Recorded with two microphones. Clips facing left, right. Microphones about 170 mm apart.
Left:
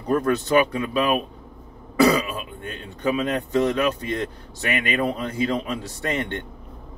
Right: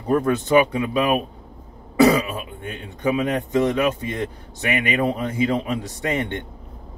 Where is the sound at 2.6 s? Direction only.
15° right (ahead or behind).